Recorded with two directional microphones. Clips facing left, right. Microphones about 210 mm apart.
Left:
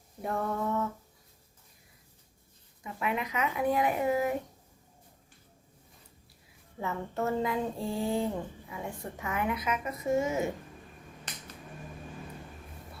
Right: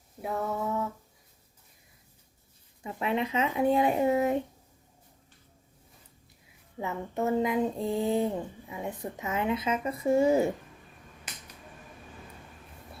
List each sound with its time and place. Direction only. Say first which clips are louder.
0.2 s speech: even; 5° right (ahead or behind)
2.8 s speech: right 4 dB; 30° right (ahead or behind)
6.7 s speech: right 2 dB; 15° right (ahead or behind); by 10.5 s 35° right (ahead or behind)